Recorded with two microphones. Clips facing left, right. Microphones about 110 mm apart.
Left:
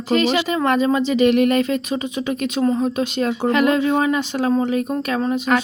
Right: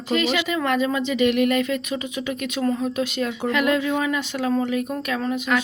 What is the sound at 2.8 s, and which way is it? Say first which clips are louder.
Speech: left 4 dB; 30° left (ahead or behind).